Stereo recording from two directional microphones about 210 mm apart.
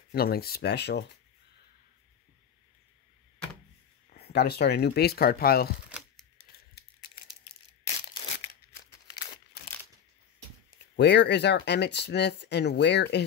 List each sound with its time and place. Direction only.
0.1 s speech: 45° left (ahead or behind)
4.1 s speech: 50° left (ahead or behind)
5.9 s typewriter: 5° right (ahead or behind)
11.0 s speech: 55° left (ahead or behind)